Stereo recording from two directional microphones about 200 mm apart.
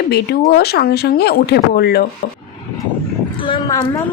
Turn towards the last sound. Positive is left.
turn(degrees=20)  # may be behind; listen again after turning